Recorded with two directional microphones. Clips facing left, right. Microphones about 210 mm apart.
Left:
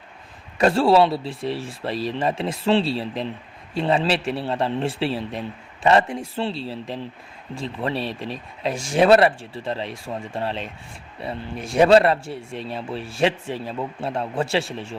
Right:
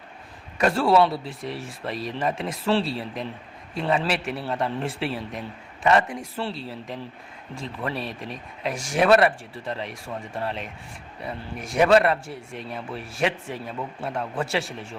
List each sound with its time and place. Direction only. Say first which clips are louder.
0.6 s speech: left 3 dB; 30° left (ahead or behind)